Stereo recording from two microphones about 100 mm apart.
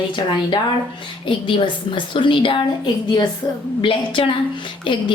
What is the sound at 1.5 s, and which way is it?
A woman's voice, 55° left (ahead or behind).